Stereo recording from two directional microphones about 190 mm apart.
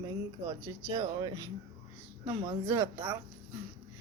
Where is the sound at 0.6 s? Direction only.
20° right (ahead or behind).